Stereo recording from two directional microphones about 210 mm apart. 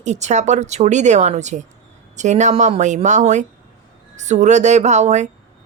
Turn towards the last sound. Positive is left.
turn(degrees=-35)  # may be behind; listen again after turning